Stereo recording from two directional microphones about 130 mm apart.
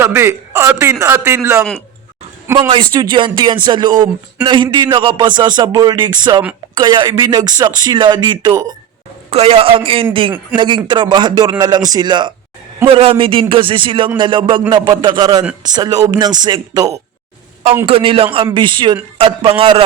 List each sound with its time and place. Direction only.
0.0 s a man's voice: 20° right (ahead or behind)
2.6 s speech: 40° right (ahead or behind)
9.3 s a man's voice: 50° right (ahead or behind)
12.8 s speech: 45° right (ahead or behind); by 17.0 s 30° right (ahead or behind)
17.8 s a man's voice: 45° right (ahead or behind)